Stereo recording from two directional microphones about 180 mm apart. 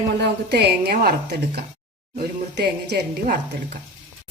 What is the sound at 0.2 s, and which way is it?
Speech, 65° right (ahead or behind).